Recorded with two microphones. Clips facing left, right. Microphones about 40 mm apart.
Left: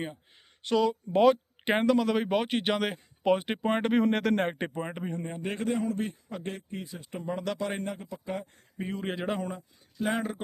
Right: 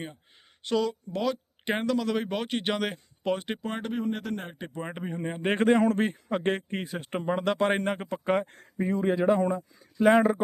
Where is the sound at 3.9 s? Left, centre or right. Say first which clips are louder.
Left 6 dB; left.